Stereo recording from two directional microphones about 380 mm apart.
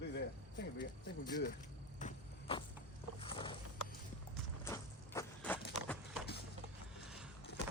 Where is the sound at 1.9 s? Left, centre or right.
Centre.